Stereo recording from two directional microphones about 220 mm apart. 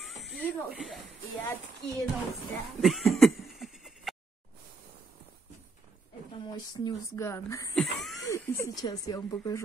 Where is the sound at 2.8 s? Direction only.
Centre (ahead or behind).